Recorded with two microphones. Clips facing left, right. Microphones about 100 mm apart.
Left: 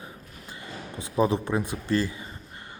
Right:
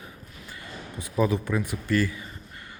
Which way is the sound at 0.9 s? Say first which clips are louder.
Left 1 dB; 30° left (ahead or behind).